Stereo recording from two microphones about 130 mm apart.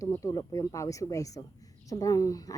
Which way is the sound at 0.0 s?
25° left (ahead or behind).